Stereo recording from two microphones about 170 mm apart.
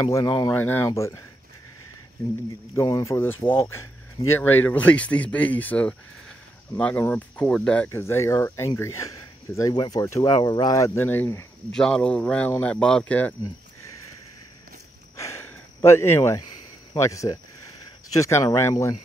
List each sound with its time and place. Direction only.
0.0 s speech: 25° left (ahead or behind)
2.7 s speech: 15° left (ahead or behind)
15.1 s a sound: 15° left (ahead or behind)
16.9 s speech: 20° left (ahead or behind)